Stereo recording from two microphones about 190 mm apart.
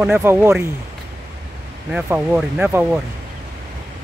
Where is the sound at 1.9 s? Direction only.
5° right (ahead or behind).